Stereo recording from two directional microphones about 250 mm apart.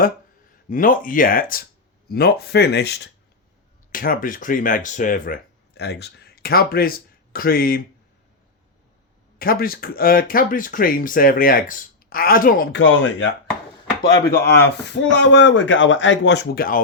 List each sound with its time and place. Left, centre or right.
0.7 s speech: left
9.4 s speech: left
14.3 s speech: left